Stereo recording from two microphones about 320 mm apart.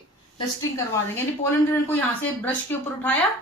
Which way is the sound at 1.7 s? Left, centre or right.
Centre.